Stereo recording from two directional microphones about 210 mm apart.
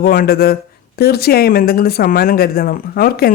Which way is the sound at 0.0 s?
45° left (ahead or behind).